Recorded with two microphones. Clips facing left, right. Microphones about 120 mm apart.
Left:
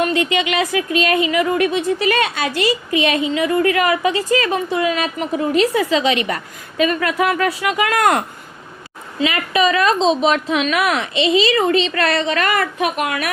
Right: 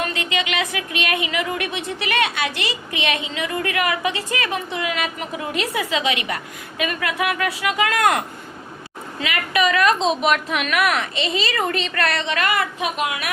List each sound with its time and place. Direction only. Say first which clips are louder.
0.0 s a woman's voice: left 7 dB; 30° left (ahead or behind)
5.5 s a woman's voice: left 7 dB; 40° left (ahead or behind)
9.2 s a woman's voice: left 4 dB; 30° left (ahead or behind)
11.1 s speech: left 8 dB; 40° right (ahead or behind)
11.9 s a woman's voice: left 4 dB; 35° left (ahead or behind); by 13.3 s 50° left (ahead or behind)